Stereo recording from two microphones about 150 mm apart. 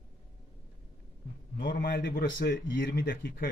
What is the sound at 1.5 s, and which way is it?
A man's voice, 70° left (ahead or behind).